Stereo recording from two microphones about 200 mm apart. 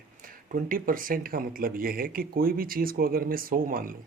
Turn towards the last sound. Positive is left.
turn(degrees=-45)  # may be behind; listen again after turning